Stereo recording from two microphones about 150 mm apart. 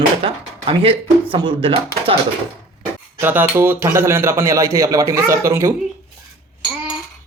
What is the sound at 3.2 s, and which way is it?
Speech, 15° right (ahead or behind).